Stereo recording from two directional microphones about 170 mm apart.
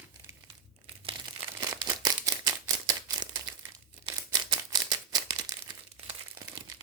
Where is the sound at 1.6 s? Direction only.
20° right (ahead or behind).